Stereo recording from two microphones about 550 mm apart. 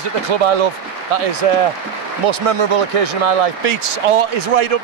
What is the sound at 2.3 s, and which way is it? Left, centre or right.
Speech, right.